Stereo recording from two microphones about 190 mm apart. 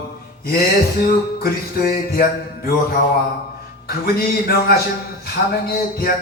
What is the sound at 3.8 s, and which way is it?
Music, 55° left (ahead or behind).